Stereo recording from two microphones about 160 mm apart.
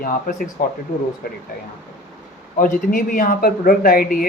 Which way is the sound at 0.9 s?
50° left (ahead or behind).